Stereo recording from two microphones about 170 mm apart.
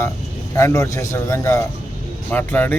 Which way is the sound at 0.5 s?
15° left (ahead or behind).